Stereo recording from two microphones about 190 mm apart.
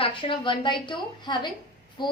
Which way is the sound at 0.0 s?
25° left (ahead or behind).